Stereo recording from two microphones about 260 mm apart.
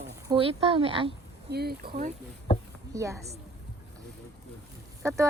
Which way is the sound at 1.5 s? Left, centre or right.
Right.